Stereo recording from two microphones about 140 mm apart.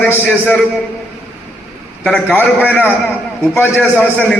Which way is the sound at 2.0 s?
10° left (ahead or behind).